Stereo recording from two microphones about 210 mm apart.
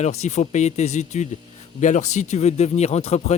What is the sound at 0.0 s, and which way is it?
Speech, 30° left (ahead or behind).